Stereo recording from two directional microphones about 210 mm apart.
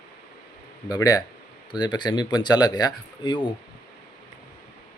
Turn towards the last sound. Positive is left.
turn(degrees=20)  # may be behind; listen again after turning